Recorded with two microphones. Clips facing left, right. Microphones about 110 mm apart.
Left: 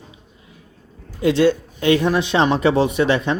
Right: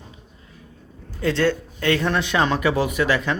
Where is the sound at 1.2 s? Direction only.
15° left (ahead or behind).